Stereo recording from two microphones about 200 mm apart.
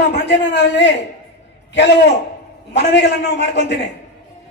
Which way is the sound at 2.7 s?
60° left (ahead or behind).